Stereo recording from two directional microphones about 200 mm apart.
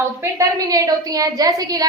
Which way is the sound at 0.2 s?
15° right (ahead or behind).